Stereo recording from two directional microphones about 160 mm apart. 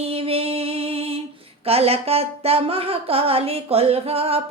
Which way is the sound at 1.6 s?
40° right (ahead or behind).